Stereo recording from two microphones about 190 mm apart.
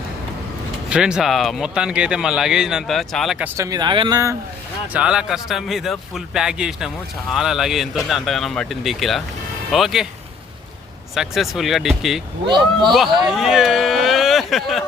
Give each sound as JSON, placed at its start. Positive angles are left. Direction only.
{"t": 0.9, "sound": "speech", "side_deg": -5}
{"t": 3.7, "sound": "speech", "side_deg": -20}
{"t": 4.9, "sound": "speech", "side_deg": -5}
{"t": 11.1, "sound": "speech", "side_deg": 0}
{"t": 12.5, "sound": "speech", "side_deg": -25}
{"t": 13.2, "sound": "speech", "side_deg": 0}